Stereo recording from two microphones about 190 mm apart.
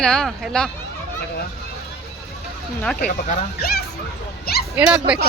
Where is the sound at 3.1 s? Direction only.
50° left (ahead or behind).